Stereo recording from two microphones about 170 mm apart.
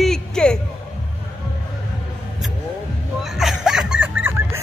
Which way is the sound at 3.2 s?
Centre (ahead or behind).